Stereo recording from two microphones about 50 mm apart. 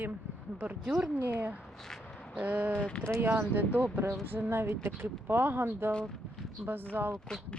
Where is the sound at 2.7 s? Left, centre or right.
Centre.